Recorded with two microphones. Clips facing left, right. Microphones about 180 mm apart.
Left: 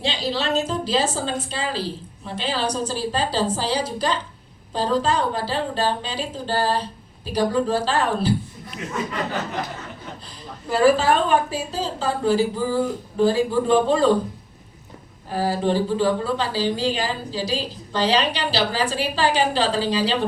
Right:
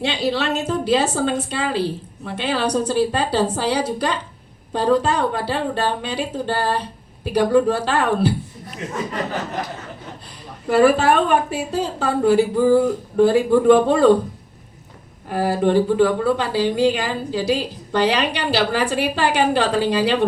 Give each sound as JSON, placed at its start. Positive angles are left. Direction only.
{"t": 0.0, "sound": "a woman's voice", "side_deg": -60}
{"t": 10.7, "sound": "a woman's voice", "side_deg": -60}
{"t": 15.3, "sound": "a woman's voice", "side_deg": -60}